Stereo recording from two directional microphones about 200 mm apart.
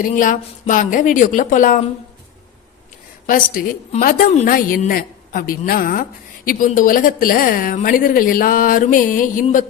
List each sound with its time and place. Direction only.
0.0 s a woman's voice: 40° left (ahead or behind)
3.2 s a woman's voice: 45° left (ahead or behind)